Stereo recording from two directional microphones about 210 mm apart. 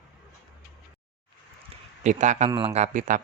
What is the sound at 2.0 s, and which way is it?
Speech, 35° right (ahead or behind).